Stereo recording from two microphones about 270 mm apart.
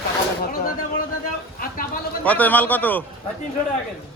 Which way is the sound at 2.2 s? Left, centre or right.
Centre.